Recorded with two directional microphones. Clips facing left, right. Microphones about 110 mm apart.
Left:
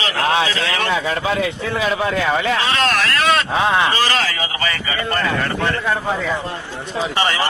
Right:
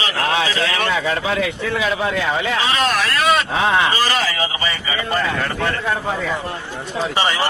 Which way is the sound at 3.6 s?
20° left (ahead or behind).